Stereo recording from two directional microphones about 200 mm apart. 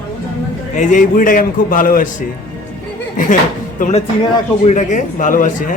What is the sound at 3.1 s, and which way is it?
Speech, 40° left (ahead or behind).